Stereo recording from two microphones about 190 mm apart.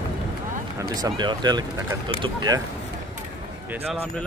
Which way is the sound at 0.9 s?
20° right (ahead or behind).